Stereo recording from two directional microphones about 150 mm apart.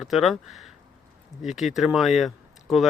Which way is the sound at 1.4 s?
Centre (ahead or behind).